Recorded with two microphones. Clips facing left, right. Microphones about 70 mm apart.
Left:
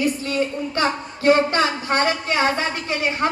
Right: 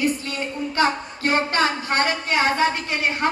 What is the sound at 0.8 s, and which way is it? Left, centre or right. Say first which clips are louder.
A woman's voice: left 5 dB; right.